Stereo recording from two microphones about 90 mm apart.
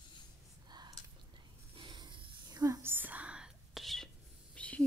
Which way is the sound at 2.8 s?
25° right (ahead or behind).